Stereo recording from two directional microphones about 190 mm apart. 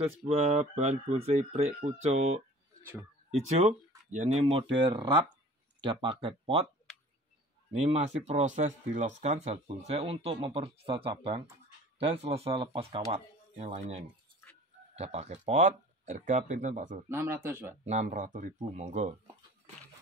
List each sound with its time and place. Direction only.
0.0 s speech: 30° right (ahead or behind)
2.8 s speech: 10° right (ahead or behind)
4.1 s speech: 35° right (ahead or behind)
7.7 s speech: 35° right (ahead or behind)
17.1 s speech: 10° right (ahead or behind)
17.8 s speech: 40° right (ahead or behind)